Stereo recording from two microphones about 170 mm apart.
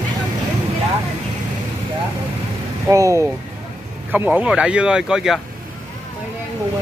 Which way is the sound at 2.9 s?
20° right (ahead or behind).